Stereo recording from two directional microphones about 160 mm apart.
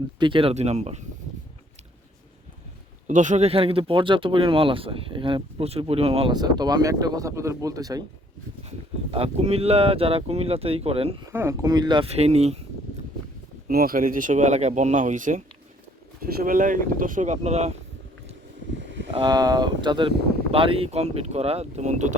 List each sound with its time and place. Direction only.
0.2 s speech: 30° right (ahead or behind)
3.1 s speech: 50° right (ahead or behind)
6.3 s speech: 25° right (ahead or behind)
9.1 s speech: 40° right (ahead or behind)
11.2 s speech: 20° right (ahead or behind); by 12.5 s 40° right (ahead or behind)
13.7 s speech: 65° right (ahead or behind); by 17.7 s 45° right (ahead or behind)
19.1 s speech: 25° right (ahead or behind); by 22.1 s 45° right (ahead or behind)